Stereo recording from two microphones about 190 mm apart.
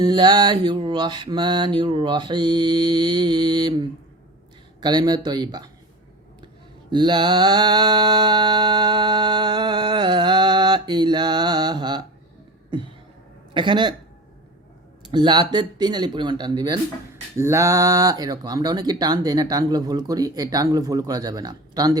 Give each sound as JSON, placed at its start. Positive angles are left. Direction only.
{"t": 0.0, "sound": "mantra", "side_deg": -20}
{"t": 6.9, "sound": "mantra", "side_deg": -25}
{"t": 13.5, "sound": "a woman's voice", "side_deg": -25}
{"t": 15.0, "sound": "mantra", "side_deg": -25}